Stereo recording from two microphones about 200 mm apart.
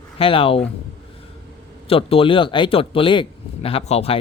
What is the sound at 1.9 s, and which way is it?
A man's voice, 30° left (ahead or behind).